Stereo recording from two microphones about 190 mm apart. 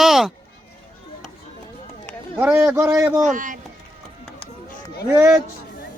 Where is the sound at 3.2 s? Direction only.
40° right (ahead or behind).